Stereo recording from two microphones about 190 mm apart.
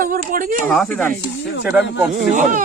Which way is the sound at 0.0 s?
45° right (ahead or behind).